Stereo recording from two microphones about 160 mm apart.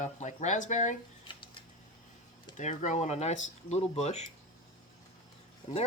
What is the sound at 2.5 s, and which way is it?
Speech, 50° left (ahead or behind).